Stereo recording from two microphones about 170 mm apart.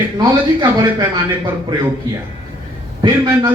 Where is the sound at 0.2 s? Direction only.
25° right (ahead or behind).